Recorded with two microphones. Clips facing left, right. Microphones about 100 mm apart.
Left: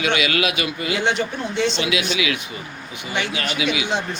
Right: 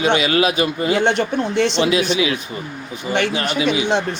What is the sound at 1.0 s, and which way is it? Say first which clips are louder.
Speech: right 4 dB; 60° right (ahead or behind).